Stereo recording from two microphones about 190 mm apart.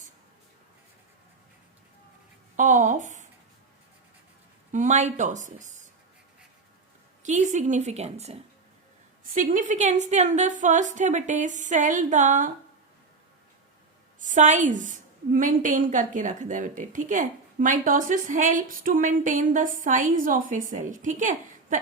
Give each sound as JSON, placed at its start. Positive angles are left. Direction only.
{"t": 2.6, "sound": "speech", "side_deg": -40}
{"t": 4.7, "sound": "a woman's voice", "side_deg": -40}
{"t": 7.2, "sound": "a woman's voice", "side_deg": -40}
{"t": 14.2, "sound": "a woman's voice", "side_deg": -40}